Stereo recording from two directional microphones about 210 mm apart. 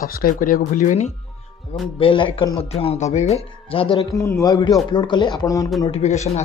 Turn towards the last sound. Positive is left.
turn(degrees=30)  # may be behind; listen again after turning